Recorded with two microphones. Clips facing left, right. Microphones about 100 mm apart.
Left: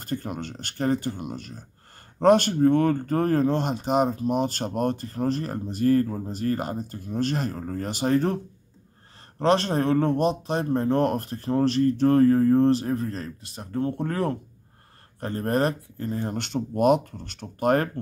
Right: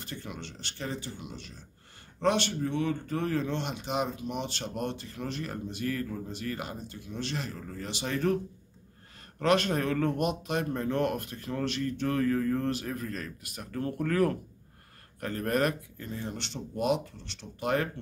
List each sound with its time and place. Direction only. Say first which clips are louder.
0.0 s speech: left 9 dB; 45° left (ahead or behind)
9.4 s speech: left 4 dB; 30° left (ahead or behind); by 18.0 s 50° left (ahead or behind)